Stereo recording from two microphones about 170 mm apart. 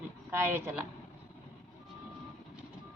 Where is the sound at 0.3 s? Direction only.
15° right (ahead or behind).